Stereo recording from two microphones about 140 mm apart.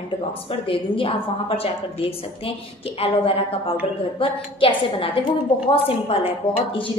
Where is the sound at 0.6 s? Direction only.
40° left (ahead or behind).